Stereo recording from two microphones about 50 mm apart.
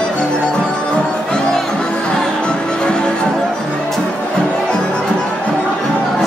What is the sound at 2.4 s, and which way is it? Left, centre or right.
Music, centre.